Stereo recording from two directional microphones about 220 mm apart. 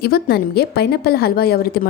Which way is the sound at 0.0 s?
45° left (ahead or behind).